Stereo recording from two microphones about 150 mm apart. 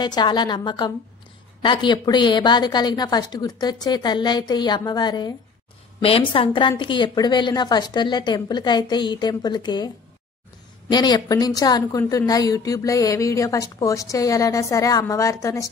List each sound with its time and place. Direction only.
0.0 s a woman's voice: 30° left (ahead or behind)
6.0 s a woman's voice: 35° left (ahead or behind)
10.9 s a woman's voice: 30° left (ahead or behind)